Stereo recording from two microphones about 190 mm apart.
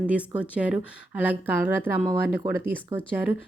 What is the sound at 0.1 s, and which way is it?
Speech, 5° right (ahead or behind).